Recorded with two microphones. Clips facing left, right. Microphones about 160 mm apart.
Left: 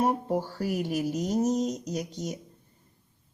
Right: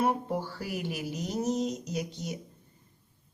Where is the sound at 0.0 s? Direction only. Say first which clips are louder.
Left 2 dB; 40° left (ahead or behind).